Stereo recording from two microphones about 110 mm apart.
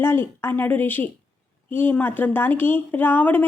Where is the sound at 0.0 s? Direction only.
20° left (ahead or behind).